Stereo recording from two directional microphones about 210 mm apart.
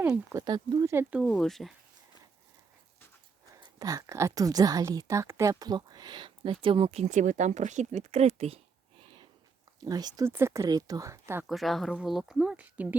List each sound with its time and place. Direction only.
0.0 s speech: 10° right (ahead or behind)
0.4 s speech: 20° right (ahead or behind)
1.2 s speech: centre (ahead or behind)
3.6 s speech: 15° right (ahead or behind)
9.8 s speech: 20° right (ahead or behind)
11.4 s speech: centre (ahead or behind)